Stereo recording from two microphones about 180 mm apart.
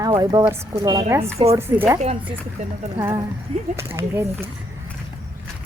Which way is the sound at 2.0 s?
35° right (ahead or behind).